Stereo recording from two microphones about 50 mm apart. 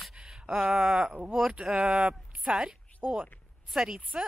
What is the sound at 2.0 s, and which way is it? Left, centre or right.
Speech, centre.